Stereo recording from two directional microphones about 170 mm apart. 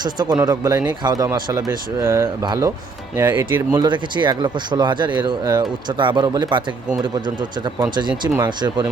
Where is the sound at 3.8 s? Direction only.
25° right (ahead or behind).